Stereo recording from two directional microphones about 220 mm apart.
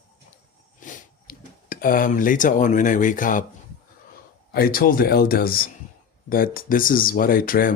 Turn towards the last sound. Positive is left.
turn(degrees=40)  # may be behind; listen again after turning